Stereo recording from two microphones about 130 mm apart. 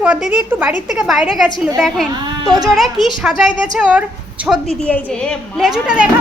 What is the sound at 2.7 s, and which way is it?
A child's voice, centre (ahead or behind).